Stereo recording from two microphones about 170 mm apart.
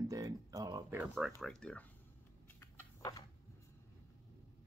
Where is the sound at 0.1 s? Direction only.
20° right (ahead or behind).